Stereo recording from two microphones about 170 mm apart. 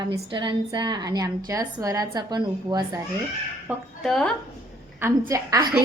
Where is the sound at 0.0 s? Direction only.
25° right (ahead or behind).